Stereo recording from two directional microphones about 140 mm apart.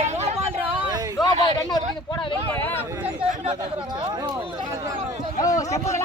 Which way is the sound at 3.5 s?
35° right (ahead or behind).